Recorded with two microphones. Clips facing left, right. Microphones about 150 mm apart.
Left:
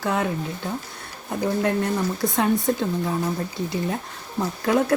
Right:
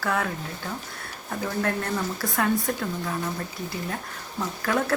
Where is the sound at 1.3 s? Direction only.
20° left (ahead or behind).